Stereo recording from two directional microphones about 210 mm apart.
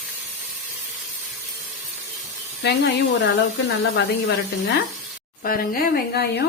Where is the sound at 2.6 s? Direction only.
50° left (ahead or behind).